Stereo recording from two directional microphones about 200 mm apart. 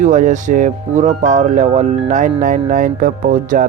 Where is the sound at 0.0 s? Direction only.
40° right (ahead or behind).